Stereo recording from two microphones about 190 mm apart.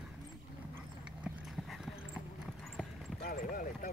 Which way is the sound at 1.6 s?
Centre (ahead or behind).